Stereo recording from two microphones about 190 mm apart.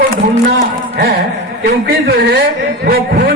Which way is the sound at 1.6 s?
55° right (ahead or behind).